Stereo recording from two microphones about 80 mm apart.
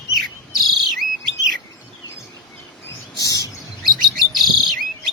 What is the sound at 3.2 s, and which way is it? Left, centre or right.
Chirp, left.